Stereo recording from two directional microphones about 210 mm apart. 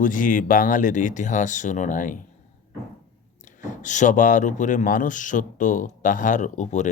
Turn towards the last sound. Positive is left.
turn(degrees=35)  # may be behind; listen again after turning